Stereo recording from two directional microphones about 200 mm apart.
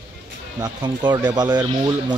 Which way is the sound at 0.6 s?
20° right (ahead or behind).